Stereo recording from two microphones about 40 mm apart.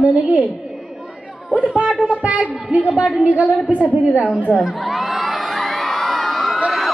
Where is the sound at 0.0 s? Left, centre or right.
Right.